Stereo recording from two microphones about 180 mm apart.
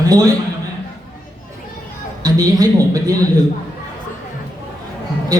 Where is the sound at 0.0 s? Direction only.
20° right (ahead or behind).